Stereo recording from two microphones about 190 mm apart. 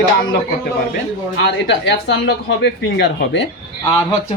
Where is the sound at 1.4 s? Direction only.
70° left (ahead or behind).